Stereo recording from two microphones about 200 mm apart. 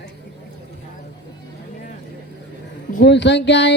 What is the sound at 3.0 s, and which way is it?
Speech, 60° left (ahead or behind).